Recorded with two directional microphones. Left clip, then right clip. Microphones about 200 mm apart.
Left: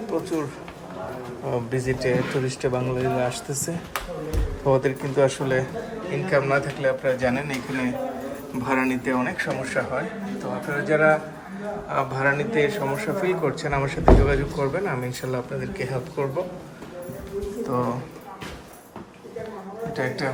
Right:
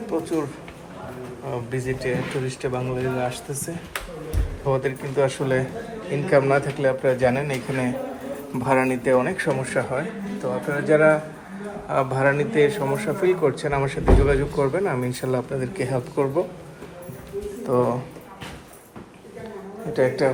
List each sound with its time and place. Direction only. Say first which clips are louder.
0.1 s speech: right 2 dB; 10° left (ahead or behind)
1.5 s speech: left 2 dB; 20° left (ahead or behind)
4.6 s speech: left 2 dB; 20° left (ahead or behind)
5.4 s a man's voice: right 1 dB; 5° left (ahead or behind)
17.7 s speech: right 6 dB; centre (ahead or behind)
19.9 s speech: right 7 dB; centre (ahead or behind)